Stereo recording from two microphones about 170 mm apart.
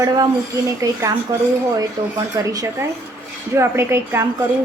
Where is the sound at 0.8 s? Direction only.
20° right (ahead or behind).